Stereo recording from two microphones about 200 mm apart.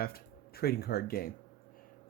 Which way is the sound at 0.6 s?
50° left (ahead or behind).